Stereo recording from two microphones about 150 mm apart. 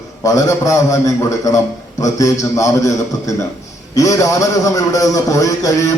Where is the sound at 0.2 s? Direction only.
20° left (ahead or behind).